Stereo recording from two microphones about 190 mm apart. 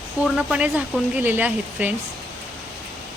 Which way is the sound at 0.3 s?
5° right (ahead or behind).